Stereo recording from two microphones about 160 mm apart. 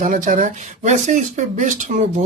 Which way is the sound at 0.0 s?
55° right (ahead or behind).